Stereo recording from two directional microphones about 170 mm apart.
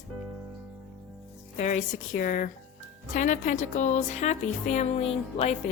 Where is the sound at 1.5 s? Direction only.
45° left (ahead or behind).